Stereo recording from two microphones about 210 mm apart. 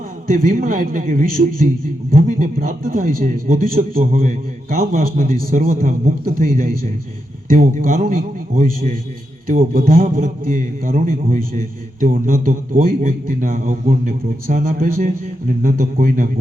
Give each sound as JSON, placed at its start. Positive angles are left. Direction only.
{"t": 0.3, "sound": "a man's voice", "side_deg": -40}